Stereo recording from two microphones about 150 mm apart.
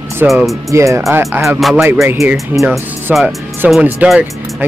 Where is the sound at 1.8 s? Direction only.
15° right (ahead or behind).